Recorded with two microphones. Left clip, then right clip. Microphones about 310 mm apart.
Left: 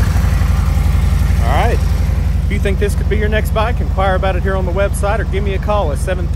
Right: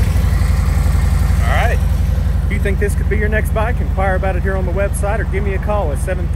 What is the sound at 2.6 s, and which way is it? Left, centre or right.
Speech, centre.